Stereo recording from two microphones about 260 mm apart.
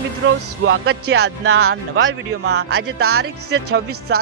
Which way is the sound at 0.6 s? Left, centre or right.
Right.